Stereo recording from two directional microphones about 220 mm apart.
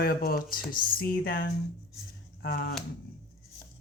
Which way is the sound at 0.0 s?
45° left (ahead or behind).